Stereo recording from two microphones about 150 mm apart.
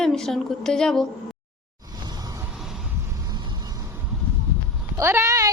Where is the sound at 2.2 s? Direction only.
25° right (ahead or behind).